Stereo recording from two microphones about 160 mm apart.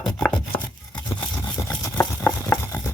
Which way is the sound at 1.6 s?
20° left (ahead or behind).